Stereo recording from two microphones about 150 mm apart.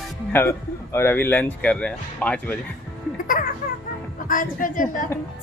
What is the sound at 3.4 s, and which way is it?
A woman's voice, 75° left (ahead or behind).